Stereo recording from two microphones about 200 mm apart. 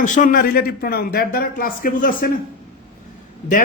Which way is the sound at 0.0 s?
40° left (ahead or behind).